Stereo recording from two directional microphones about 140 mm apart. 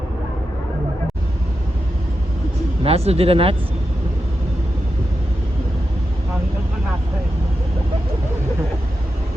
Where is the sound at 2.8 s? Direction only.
45° right (ahead or behind).